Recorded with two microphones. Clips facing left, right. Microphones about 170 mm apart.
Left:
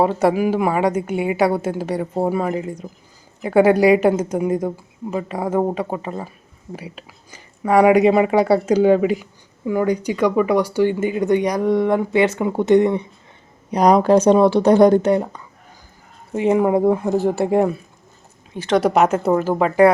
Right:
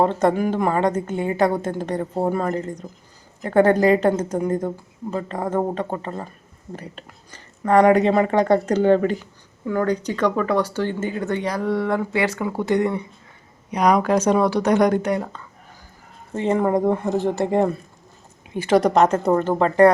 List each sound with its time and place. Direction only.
0.0 s speech: 10° left (ahead or behind)
13.7 s speech: 35° left (ahead or behind)
16.3 s speech: 10° left (ahead or behind)
18.5 s a woman's voice: 10° right (ahead or behind)
18.8 s speech: 5° left (ahead or behind)